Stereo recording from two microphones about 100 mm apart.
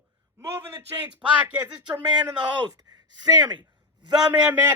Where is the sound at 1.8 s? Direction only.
45° right (ahead or behind).